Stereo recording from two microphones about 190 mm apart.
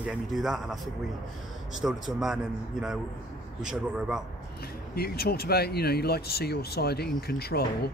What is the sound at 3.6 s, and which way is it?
Speech, 5° right (ahead or behind).